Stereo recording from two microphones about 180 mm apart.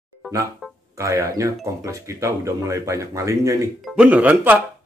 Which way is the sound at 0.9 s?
15° right (ahead or behind).